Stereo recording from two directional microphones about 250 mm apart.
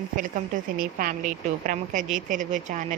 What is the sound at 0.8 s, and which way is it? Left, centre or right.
A woman's voice, right.